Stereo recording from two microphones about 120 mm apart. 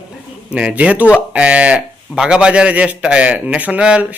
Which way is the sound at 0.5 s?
10° right (ahead or behind).